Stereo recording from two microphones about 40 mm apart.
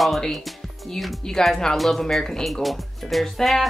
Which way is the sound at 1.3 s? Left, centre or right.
Centre.